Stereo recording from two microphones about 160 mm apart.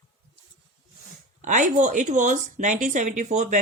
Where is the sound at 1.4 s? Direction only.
50° right (ahead or behind).